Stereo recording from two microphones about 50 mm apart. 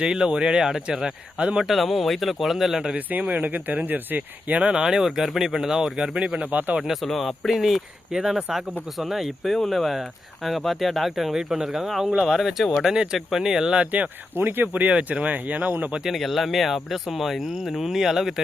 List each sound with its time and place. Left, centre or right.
0.0 s speech: centre
1.6 s speech: centre
2.9 s speech: right
4.5 s speech: centre
6.5 s speech: right
6.8 s speech: centre
14.3 s speech: right
14.9 s speech: right
16.0 s speech: centre